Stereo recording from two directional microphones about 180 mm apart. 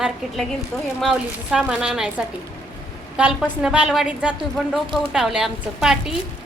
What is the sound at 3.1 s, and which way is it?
A child's voice, 5° right (ahead or behind).